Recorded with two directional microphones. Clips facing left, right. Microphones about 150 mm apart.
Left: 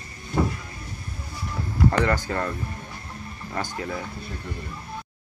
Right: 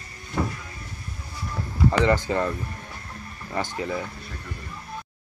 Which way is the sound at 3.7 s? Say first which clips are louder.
Right 2 dB; centre (ahead or behind).